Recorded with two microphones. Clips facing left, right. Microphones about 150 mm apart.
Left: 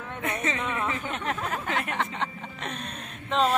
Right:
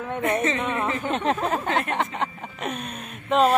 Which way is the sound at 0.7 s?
40° right (ahead or behind).